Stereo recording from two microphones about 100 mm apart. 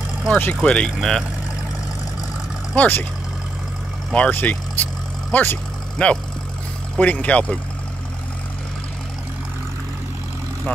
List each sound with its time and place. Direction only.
0.3 s speech: 15° left (ahead or behind)
2.7 s speech: 15° left (ahead or behind)
4.1 s speech: 15° left (ahead or behind)
5.3 s vehicle: 20° left (ahead or behind)
7.0 s speech: 15° left (ahead or behind)